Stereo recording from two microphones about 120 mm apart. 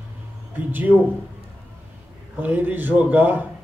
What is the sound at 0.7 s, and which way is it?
Speech, 15° right (ahead or behind).